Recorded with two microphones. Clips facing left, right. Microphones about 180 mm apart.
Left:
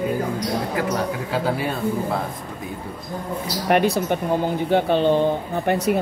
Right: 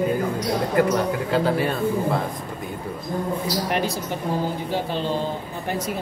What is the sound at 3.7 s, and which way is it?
Speech, 65° left (ahead or behind).